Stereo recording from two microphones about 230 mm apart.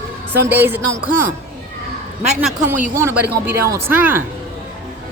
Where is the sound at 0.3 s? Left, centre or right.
Centre.